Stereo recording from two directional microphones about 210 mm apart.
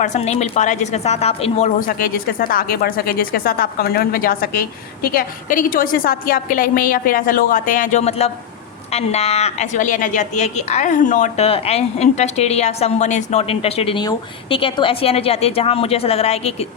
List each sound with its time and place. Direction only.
0.0 s a woman's voice: 35° left (ahead or behind)